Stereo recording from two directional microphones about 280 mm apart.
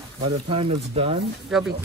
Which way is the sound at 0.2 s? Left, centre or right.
Centre.